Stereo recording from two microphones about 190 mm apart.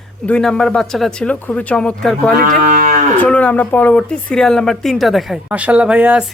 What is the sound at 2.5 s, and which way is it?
Cattle, 45° right (ahead or behind).